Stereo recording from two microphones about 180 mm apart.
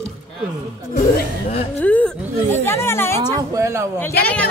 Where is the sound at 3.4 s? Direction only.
15° right (ahead or behind).